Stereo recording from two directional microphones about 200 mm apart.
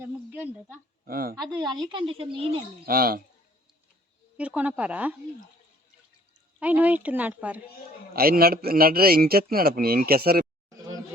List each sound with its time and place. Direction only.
0.0 s a sound: 10° right (ahead or behind)
1.0 s a man's voice: 45° right (ahead or behind)
1.5 s speech: 20° right (ahead or behind)
2.8 s a man's voice: 50° right (ahead or behind)
4.4 s speech: 5° right (ahead or behind)
6.6 s speech: 10° right (ahead or behind)
8.1 s a man's voice: 50° right (ahead or behind)